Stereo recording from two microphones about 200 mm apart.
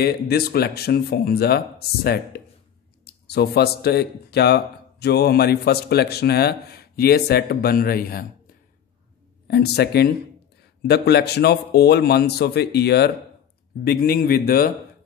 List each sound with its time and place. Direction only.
0.0 s a man's voice: 50° left (ahead or behind)
9.8 s a man's voice: 55° left (ahead or behind)